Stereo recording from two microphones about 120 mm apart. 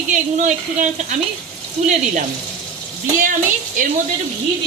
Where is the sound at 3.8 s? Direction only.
90° right.